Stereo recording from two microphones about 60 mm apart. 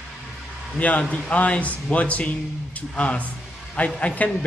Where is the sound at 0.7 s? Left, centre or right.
Left.